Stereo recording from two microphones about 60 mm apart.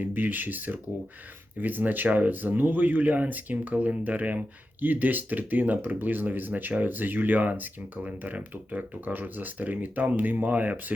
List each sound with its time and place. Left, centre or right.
0.0 s speech: right